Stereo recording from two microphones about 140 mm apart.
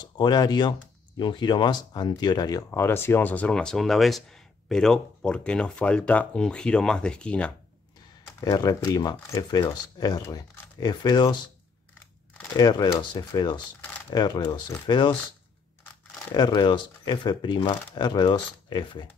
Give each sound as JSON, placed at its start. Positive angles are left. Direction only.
{"t": 0.0, "sound": "speech", "side_deg": 30}
{"t": 8.4, "sound": "speech", "side_deg": 25}
{"t": 12.5, "sound": "speech", "side_deg": 30}
{"t": 16.3, "sound": "speech", "side_deg": 30}